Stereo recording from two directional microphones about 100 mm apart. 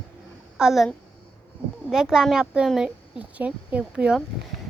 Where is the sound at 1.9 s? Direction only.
5° right (ahead or behind).